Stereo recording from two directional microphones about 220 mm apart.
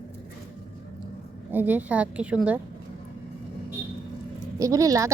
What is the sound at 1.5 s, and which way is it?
A woman's voice, 10° right (ahead or behind).